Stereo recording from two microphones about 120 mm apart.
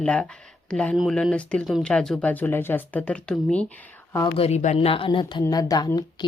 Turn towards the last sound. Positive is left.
turn(degrees=35)  # may be behind; listen again after turning